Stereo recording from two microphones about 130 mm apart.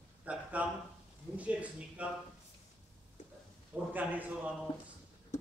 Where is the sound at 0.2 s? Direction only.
10° right (ahead or behind).